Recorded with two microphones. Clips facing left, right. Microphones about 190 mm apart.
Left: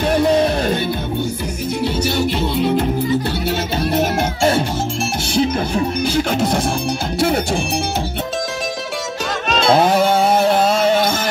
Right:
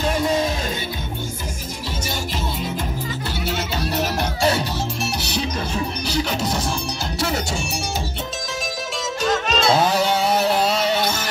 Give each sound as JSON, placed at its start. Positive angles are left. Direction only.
{"t": 0.1, "sound": "music", "side_deg": 60}
{"t": 2.0, "sound": "music", "side_deg": 65}
{"t": 9.5, "sound": "music", "side_deg": 55}